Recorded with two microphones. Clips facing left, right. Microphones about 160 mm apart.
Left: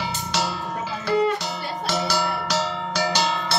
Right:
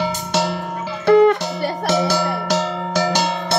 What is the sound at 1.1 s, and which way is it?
Music, 65° right (ahead or behind).